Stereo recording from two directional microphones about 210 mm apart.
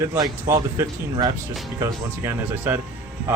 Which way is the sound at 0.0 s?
15° right (ahead or behind).